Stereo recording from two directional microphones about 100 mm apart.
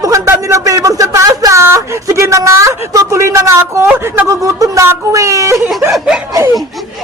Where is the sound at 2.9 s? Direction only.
30° right (ahead or behind).